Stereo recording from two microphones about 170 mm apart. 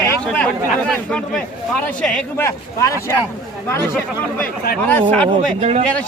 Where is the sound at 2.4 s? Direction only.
15° left (ahead or behind).